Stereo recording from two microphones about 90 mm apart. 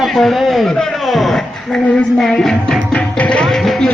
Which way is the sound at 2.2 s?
5° left (ahead or behind).